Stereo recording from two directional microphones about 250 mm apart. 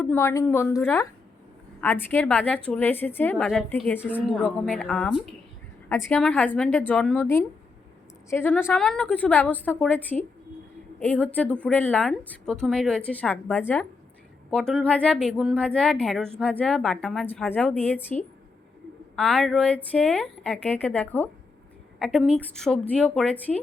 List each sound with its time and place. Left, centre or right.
0.0 s a woman's voice: centre